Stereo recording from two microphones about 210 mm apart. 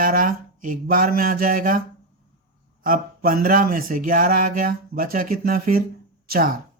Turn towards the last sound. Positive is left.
turn(degrees=-40)  # may be behind; listen again after turning